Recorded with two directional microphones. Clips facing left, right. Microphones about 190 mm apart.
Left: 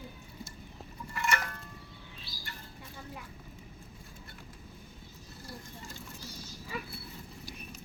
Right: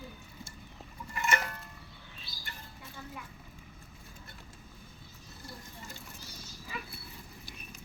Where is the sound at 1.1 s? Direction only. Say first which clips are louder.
Right 1 dB; 20° right (ahead or behind).